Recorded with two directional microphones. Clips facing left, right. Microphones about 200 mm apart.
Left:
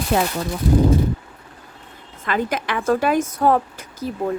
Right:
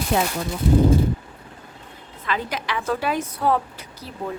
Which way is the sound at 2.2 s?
50° left (ahead or behind).